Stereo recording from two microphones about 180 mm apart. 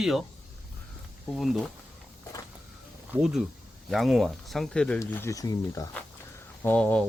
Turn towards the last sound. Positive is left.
turn(degrees=10)  # may be behind; listen again after turning